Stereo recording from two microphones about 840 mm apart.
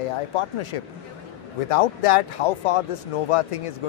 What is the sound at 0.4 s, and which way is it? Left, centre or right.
Speech, left.